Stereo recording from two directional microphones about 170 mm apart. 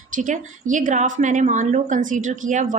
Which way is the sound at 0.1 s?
50° right (ahead or behind).